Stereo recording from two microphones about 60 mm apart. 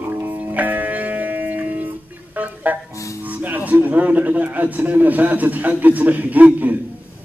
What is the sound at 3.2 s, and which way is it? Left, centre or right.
A man's voice, right.